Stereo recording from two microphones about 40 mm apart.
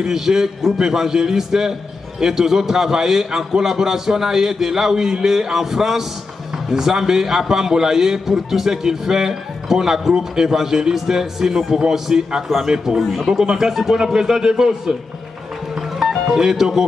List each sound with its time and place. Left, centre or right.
0.0 s a man's voice: centre
16.0 s music: centre